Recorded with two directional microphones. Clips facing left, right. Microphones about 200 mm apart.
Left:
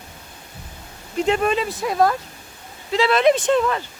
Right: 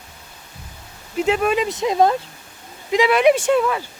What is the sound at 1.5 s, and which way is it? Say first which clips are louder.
Speech: right 2 dB; 20° right (ahead or behind).